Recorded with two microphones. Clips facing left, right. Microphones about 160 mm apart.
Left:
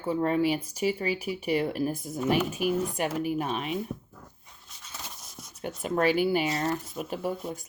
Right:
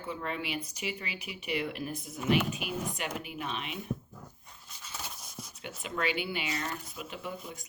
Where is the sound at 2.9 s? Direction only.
45° left (ahead or behind).